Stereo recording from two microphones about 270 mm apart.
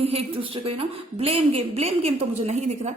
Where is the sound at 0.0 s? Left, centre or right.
Right.